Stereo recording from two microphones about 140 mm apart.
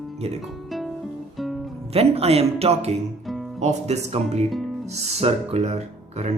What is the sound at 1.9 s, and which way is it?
Speech, 45° right (ahead or behind).